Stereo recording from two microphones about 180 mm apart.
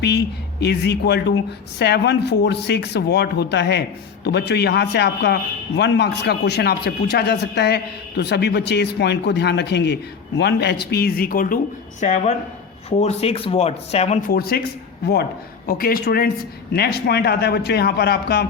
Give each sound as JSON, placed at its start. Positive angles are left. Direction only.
{"t": 0.0, "sound": "speech", "side_deg": 70}
{"t": 14.3, "sound": "speech", "side_deg": 55}